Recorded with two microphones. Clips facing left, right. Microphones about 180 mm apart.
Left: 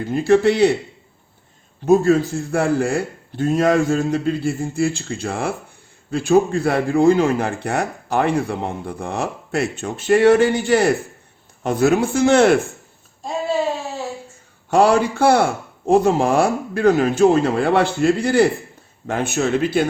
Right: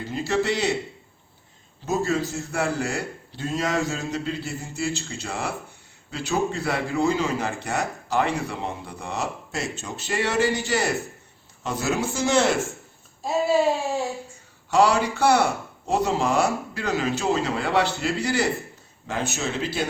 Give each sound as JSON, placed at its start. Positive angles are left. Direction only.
{"t": 0.1, "sound": "a man's voice", "side_deg": 55}
{"t": 1.9, "sound": "a man's voice", "side_deg": 55}
{"t": 13.2, "sound": "a sound", "side_deg": -10}
{"t": 14.7, "sound": "a man's voice", "side_deg": 55}